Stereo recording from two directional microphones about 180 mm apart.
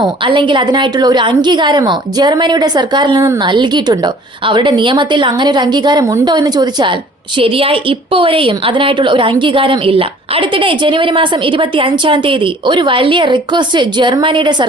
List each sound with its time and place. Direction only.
0.0 s a woman's voice: 25° right (ahead or behind)